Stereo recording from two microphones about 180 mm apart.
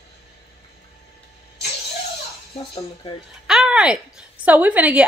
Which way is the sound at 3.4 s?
5° right (ahead or behind).